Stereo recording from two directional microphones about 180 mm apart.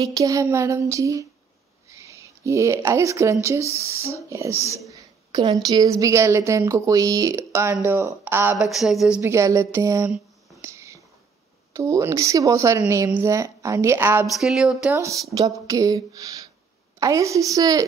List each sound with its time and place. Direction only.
0.0 s speech: 20° right (ahead or behind)
8.6 s speech: centre (ahead or behind)
9.2 s speech: 15° right (ahead or behind)
10.6 s whispering: 15° right (ahead or behind)
11.7 s speech: 15° right (ahead or behind)
14.2 s speech: centre (ahead or behind)
15.3 s speech: 20° right (ahead or behind)